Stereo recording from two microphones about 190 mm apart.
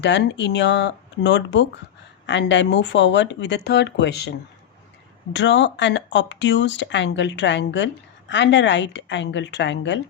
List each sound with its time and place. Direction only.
0.0 s speech: 65° left (ahead or behind)